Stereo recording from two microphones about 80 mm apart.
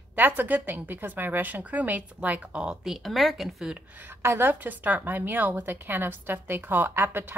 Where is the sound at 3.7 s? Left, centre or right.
Right.